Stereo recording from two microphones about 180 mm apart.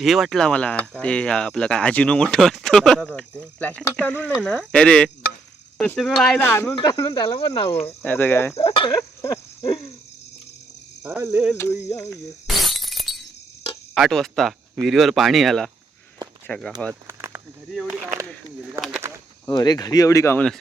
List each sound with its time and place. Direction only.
0.0 s speech: centre (ahead or behind)
6.7 s speech: 30° left (ahead or behind)
7.9 s speech: 10° left (ahead or behind)
8.5 s speech: 30° left (ahead or behind)
9.0 s a sound: 15° left (ahead or behind)
11.0 s speech: 10° right (ahead or behind)
11.5 s speech: 15° left (ahead or behind)
12.5 s glass: centre (ahead or behind)
13.9 s speech: centre (ahead or behind)
16.9 s a sound: 15° right (ahead or behind)
18.6 s speech: 5° right (ahead or behind)
19.5 s speech: 20° left (ahead or behind)